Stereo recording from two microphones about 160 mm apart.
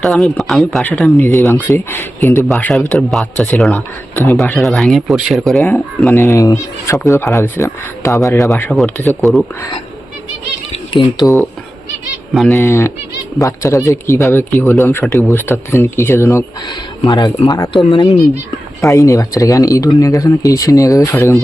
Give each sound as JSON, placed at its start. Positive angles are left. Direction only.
{"t": 0.0, "sound": "speech", "side_deg": 0}
{"t": 1.1, "sound": "speech", "side_deg": 15}
{"t": 4.5, "sound": "speech", "side_deg": 0}
{"t": 6.1, "sound": "speech", "side_deg": 20}
{"t": 9.3, "sound": "speech", "side_deg": 0}
{"t": 10.9, "sound": "speech", "side_deg": 25}
{"t": 12.5, "sound": "speech", "side_deg": 20}
{"t": 15.0, "sound": "speech", "side_deg": 5}
{"t": 18.8, "sound": "speech", "side_deg": 20}